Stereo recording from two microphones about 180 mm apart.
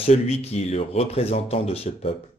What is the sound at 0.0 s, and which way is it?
Speech, 35° left (ahead or behind).